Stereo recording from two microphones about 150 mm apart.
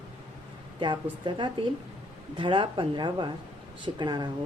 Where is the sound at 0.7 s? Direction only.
30° right (ahead or behind).